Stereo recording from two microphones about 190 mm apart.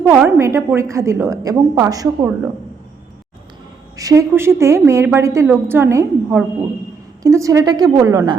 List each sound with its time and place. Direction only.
0.0 s a woman's voice: 10° right (ahead or behind)
3.9 s a woman's voice: 15° right (ahead or behind)